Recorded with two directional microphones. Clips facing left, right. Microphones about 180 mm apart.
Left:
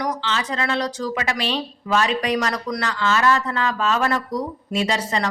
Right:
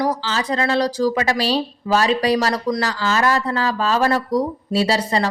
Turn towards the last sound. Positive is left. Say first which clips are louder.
# right 4 dB
turn(degrees=-35)  # may be behind; listen again after turning